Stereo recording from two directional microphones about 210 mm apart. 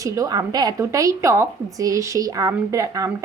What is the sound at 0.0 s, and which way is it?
A woman's voice, 15° right (ahead or behind).